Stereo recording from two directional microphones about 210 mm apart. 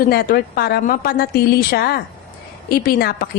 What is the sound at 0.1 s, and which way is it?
A woman's voice, 50° left (ahead or behind).